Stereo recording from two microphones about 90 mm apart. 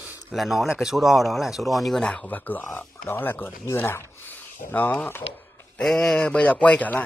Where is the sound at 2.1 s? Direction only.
20° left (ahead or behind).